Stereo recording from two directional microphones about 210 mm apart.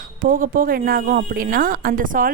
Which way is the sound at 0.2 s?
40° right (ahead or behind).